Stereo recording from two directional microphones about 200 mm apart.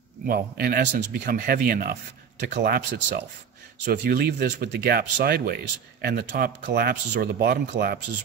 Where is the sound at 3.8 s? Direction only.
50° right (ahead or behind).